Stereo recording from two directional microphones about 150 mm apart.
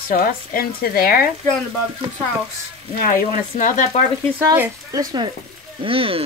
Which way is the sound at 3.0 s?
60° left (ahead or behind).